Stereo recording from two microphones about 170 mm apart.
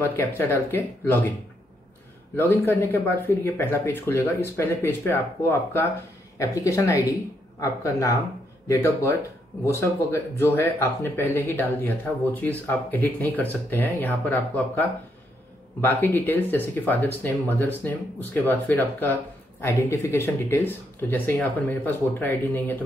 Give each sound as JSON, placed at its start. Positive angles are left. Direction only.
{"t": 0.0, "sound": "speech", "side_deg": 15}
{"t": 2.3, "sound": "speech", "side_deg": 10}
{"t": 8.6, "sound": "speech", "side_deg": 15}